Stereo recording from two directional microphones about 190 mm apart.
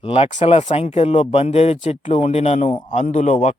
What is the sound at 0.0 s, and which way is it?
Speech, 30° left (ahead or behind).